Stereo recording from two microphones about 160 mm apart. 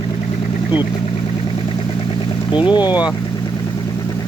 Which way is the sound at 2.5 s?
30° left (ahead or behind).